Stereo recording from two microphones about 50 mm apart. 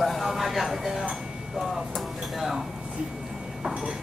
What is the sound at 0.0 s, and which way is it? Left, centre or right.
Speech, centre.